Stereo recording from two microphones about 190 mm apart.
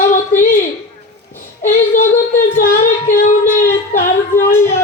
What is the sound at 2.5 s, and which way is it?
Female singing, 45° left (ahead or behind).